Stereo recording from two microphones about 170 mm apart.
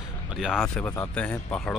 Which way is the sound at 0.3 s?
5° right (ahead or behind).